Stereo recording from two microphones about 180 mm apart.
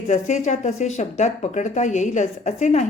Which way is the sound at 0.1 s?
40° left (ahead or behind).